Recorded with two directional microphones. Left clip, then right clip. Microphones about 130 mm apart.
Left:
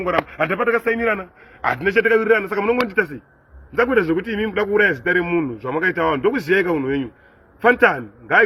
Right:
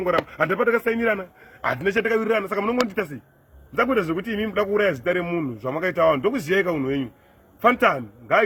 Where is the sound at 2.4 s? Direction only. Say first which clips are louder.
Left 4 dB; 40° right (ahead or behind).